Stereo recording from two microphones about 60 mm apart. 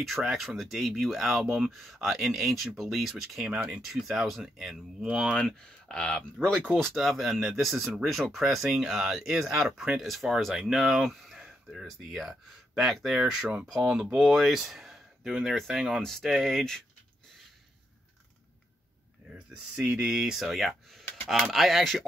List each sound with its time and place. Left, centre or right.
0.0 s speech: centre
5.4 s speech: centre
6.8 s speech: centre
14.1 s speech: centre
19.3 s a sound: centre
20.0 s speech: centre